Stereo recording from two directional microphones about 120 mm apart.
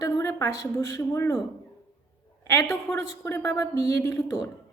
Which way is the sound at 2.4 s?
25° left (ahead or behind).